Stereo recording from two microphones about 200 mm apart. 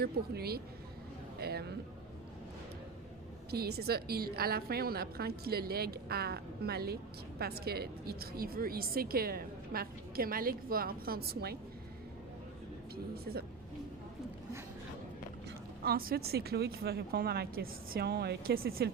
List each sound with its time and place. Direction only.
0.0 s a woman's voice: 50° right (ahead or behind)
3.5 s a woman's voice: 50° right (ahead or behind)
13.3 s a woman's voice: 50° right (ahead or behind)
15.8 s a woman's voice: 50° right (ahead or behind)